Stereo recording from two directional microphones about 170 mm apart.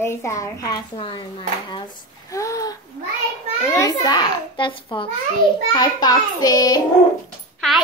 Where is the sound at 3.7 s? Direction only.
20° left (ahead or behind).